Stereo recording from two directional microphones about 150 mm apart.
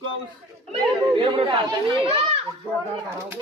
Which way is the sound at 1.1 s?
35° right (ahead or behind).